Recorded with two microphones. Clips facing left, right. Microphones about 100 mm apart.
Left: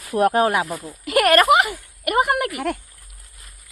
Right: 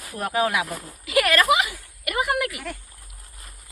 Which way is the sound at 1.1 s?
50° left (ahead or behind).